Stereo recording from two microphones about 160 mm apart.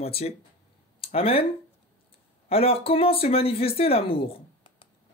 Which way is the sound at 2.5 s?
35° left (ahead or behind).